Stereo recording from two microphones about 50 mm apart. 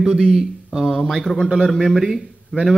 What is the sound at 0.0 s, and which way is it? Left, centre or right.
A man's voice, centre.